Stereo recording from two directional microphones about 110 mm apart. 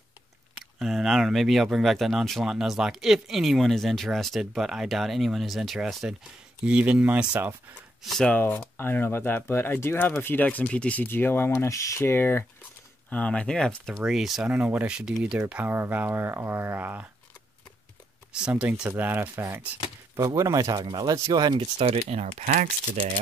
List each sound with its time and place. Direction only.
0.7 s speech: centre (ahead or behind)
8.0 s speech: 5° left (ahead or behind)
8.3 s speech: 15° left (ahead or behind); by 17.1 s 15° right (ahead or behind)
18.4 s speech: 10° right (ahead or behind); by 21.5 s 40° right (ahead or behind)
21.5 s speech: 70° right (ahead or behind)